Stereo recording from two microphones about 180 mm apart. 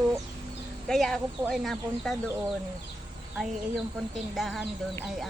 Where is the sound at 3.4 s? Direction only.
Centre (ahead or behind).